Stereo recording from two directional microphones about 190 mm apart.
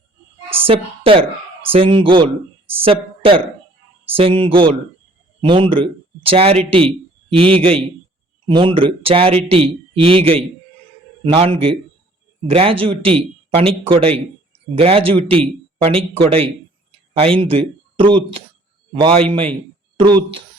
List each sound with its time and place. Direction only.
0.6 s a man's voice: 30° right (ahead or behind)